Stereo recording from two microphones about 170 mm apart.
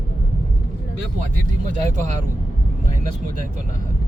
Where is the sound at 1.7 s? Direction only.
45° right (ahead or behind).